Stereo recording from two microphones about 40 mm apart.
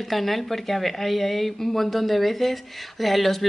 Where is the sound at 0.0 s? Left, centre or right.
Centre.